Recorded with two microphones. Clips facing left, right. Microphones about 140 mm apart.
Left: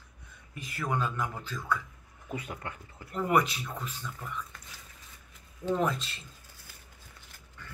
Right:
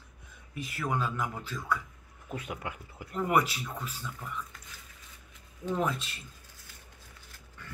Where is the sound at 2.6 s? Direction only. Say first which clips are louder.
Right 2 dB; 15° right (ahead or behind).